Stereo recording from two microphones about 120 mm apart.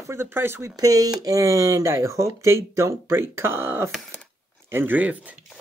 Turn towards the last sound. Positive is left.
turn(degrees=-15)  # may be behind; listen again after turning